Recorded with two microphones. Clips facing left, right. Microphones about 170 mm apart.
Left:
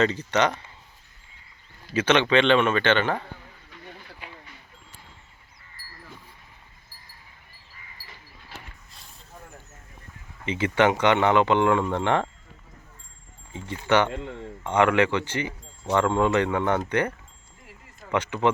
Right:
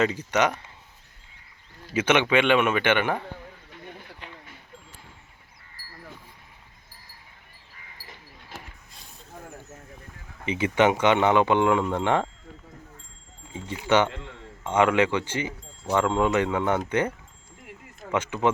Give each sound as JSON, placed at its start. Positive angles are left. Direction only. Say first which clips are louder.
{"t": 0.0, "sound": "speech", "louder": "left 1 dB", "side_deg": -10}
{"t": 1.9, "sound": "speech", "louder": "left 1 dB", "side_deg": -10}
{"t": 4.2, "sound": "a sound", "louder": "left 1 dB", "side_deg": 10}
{"t": 10.4, "sound": "speech", "louder": "even", "side_deg": -15}
{"t": 13.5, "sound": "speech", "louder": "even", "side_deg": -15}
{"t": 14.1, "sound": "a sound", "louder": "left 7 dB", "side_deg": 15}
{"t": 14.8, "sound": "speech", "louder": "even", "side_deg": -15}
{"t": 18.1, "sound": "speech", "louder": "left 1 dB", "side_deg": -10}